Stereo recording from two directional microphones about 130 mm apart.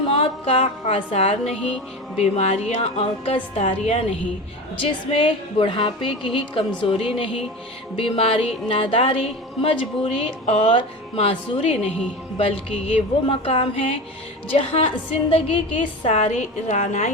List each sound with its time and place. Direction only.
0.1 s speech: 45° left (ahead or behind)
4.8 s music: 40° left (ahead or behind)
7.9 s speech: 45° left (ahead or behind)
15.3 s speech: 45° left (ahead or behind)
16.0 s a woman's voice: 60° left (ahead or behind)